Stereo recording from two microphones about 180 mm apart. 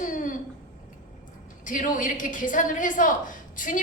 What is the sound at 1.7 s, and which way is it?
A woman's voice, 45° left (ahead or behind).